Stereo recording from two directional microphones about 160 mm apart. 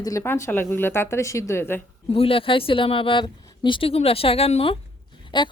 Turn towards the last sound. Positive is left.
turn(degrees=30)  # may be behind; listen again after turning